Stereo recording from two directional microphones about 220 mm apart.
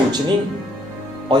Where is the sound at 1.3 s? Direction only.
20° right (ahead or behind).